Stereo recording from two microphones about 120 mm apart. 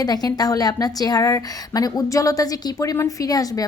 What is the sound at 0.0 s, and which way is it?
A woman's voice, 35° left (ahead or behind).